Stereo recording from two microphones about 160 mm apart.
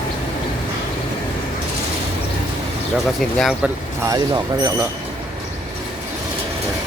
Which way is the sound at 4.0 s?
20° right (ahead or behind).